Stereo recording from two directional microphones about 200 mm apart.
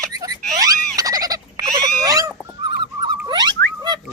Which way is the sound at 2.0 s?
20° right (ahead or behind).